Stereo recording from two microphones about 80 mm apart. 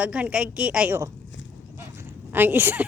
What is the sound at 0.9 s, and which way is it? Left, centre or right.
Speech, right.